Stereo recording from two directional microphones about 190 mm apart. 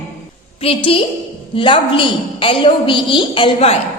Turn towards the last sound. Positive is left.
turn(degrees=30)  # may be behind; listen again after turning